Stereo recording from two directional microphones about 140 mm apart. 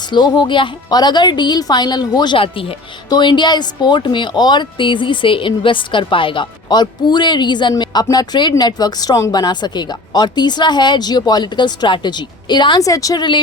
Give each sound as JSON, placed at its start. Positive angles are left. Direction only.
{"t": 0.1, "sound": "speech", "side_deg": 30}